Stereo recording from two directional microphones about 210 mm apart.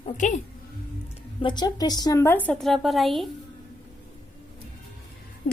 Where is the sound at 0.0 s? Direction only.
35° left (ahead or behind).